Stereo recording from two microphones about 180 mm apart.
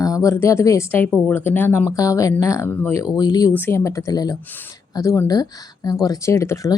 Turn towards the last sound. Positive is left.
turn(degrees=15)  # may be behind; listen again after turning